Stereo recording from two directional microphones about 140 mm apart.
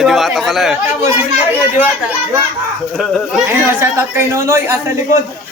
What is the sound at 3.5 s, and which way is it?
Speech, 15° right (ahead or behind).